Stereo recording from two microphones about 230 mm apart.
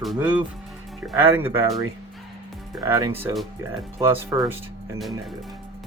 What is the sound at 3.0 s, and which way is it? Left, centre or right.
Speech, centre.